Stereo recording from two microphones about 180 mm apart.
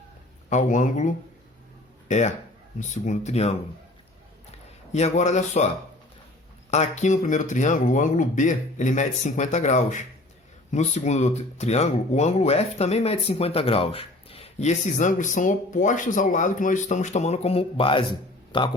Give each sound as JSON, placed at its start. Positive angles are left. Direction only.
{"t": 0.5, "sound": "speech", "side_deg": 45}
{"t": 4.9, "sound": "speech", "side_deg": 40}
{"t": 6.7, "sound": "speech", "side_deg": 40}